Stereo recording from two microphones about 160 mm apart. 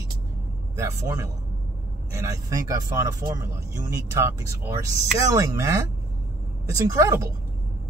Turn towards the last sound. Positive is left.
turn(degrees=-20)  # may be behind; listen again after turning